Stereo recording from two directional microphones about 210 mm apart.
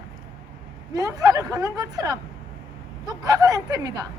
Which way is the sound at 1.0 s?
15° right (ahead or behind).